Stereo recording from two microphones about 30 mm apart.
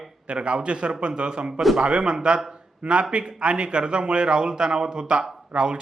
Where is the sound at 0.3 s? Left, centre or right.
Right.